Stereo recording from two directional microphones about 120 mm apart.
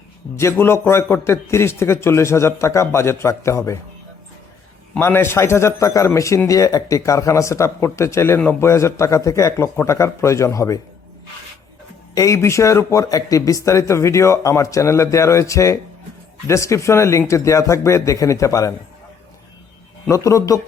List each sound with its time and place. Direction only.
0.3 s speech: 20° left (ahead or behind)
4.9 s speech: 20° left (ahead or behind)
12.1 s speech: 25° left (ahead or behind)
20.1 s speech: 25° left (ahead or behind)